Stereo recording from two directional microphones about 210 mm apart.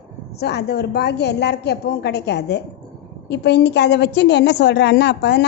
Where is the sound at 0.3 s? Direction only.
50° left (ahead or behind).